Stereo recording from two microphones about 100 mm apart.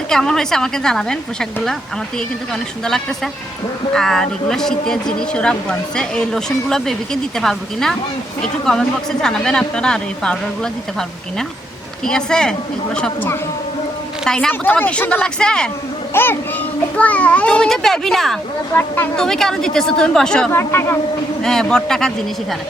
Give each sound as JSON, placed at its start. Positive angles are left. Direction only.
{"t": 0.1, "sound": "speech", "side_deg": 5}
{"t": 3.9, "sound": "speech", "side_deg": 5}
{"t": 14.3, "sound": "speech", "side_deg": 10}
{"t": 16.1, "sound": "speech", "side_deg": 25}
{"t": 20.5, "sound": "speech", "side_deg": 25}
{"t": 21.4, "sound": "speech", "side_deg": 5}